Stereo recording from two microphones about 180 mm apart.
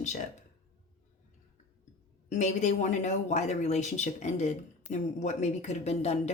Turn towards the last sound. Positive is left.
turn(degrees=35)  # may be behind; listen again after turning